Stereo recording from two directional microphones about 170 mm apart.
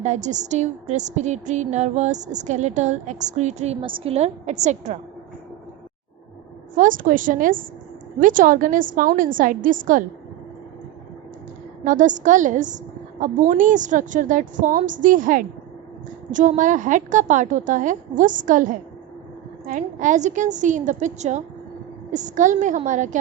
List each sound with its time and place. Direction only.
0.0 s a woman's voice: 45° right (ahead or behind)
6.7 s a woman's voice: 50° right (ahead or behind)
11.9 s a woman's voice: 50° right (ahead or behind)